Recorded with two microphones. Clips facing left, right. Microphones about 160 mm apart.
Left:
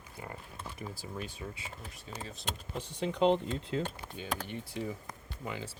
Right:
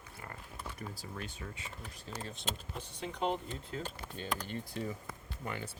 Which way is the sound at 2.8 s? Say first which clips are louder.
Left 9 dB; 90° left.